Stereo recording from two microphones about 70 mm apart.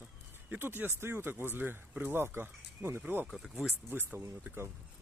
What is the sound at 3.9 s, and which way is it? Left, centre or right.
Speech, right.